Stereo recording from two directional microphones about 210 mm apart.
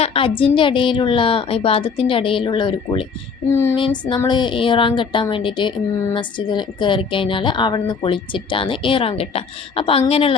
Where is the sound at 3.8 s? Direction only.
20° left (ahead or behind).